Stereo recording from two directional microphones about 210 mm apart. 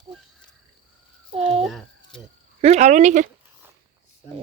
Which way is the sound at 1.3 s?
25° right (ahead or behind).